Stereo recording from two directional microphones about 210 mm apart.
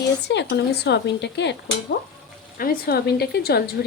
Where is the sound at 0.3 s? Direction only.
55° left (ahead or behind).